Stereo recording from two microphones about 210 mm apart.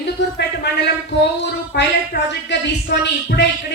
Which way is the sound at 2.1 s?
55° left (ahead or behind).